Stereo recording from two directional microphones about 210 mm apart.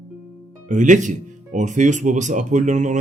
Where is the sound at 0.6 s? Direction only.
35° right (ahead or behind).